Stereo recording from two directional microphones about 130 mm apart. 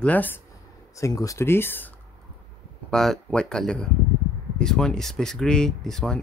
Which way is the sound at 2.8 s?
5° left (ahead or behind).